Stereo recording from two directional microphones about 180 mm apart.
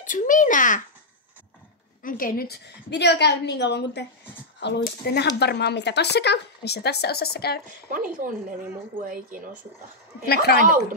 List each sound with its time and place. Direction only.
0.0 s a child's voice: 45° left (ahead or behind)
2.0 s speech: 50° left (ahead or behind)
7.9 s speech: 50° right (ahead or behind)
10.2 s a woman's voice: 60° left (ahead or behind)